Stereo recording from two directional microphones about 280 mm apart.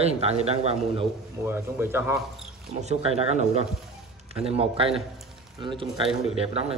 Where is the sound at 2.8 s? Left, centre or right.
Right.